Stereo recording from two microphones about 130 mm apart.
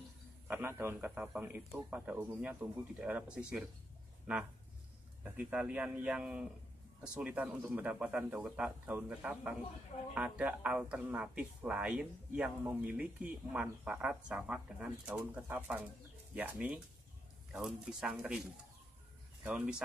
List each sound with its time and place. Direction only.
0.5 s a man's voice: 15° right (ahead or behind)
19.4 s speech: 5° right (ahead or behind)